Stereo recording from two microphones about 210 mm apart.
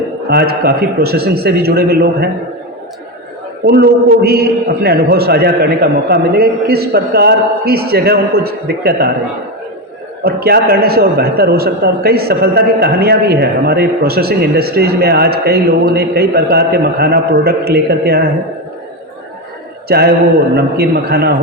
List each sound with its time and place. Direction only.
0.3 s a man's voice: 45° right (ahead or behind)
3.7 s a man's voice: 50° right (ahead or behind)
10.2 s a man's voice: 50° right (ahead or behind)
19.9 s a man's voice: 50° right (ahead or behind)